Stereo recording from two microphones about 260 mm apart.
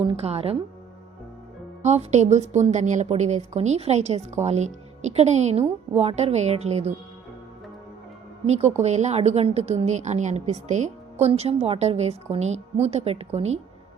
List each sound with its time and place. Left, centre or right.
0.0 s a woman's voice: right
1.8 s a woman's voice: right
8.4 s a woman's voice: right